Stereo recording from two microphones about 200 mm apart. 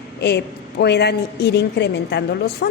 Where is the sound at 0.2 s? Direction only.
55° left (ahead or behind).